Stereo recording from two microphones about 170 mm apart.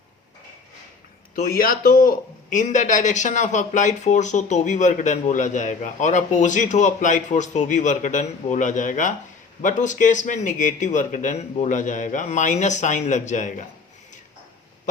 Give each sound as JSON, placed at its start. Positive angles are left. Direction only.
{"t": 1.4, "sound": "a man's voice", "side_deg": 60}